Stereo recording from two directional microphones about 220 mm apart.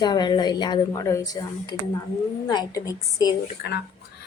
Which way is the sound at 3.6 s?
40° left (ahead or behind).